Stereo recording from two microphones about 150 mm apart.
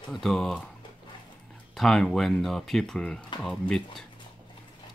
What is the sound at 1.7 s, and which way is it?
Speech, 5° left (ahead or behind).